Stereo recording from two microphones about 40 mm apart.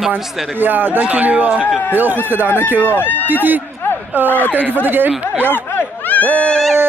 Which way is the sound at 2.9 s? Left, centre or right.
Left.